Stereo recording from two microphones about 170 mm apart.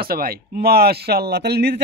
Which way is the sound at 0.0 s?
60° right (ahead or behind).